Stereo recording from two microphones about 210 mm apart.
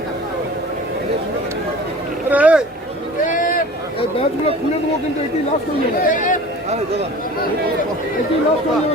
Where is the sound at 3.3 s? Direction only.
40° left (ahead or behind).